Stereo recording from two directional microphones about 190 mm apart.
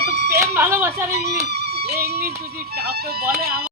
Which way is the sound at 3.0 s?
55° right (ahead or behind).